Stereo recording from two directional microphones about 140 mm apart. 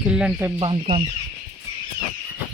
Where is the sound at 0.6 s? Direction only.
40° right (ahead or behind).